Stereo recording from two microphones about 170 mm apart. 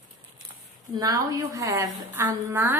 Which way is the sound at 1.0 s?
20° right (ahead or behind).